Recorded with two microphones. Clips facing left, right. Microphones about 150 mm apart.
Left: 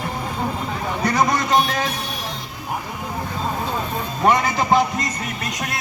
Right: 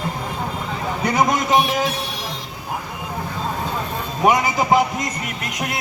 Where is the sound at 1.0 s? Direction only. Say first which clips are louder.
Right 1 dB; 20° right (ahead or behind).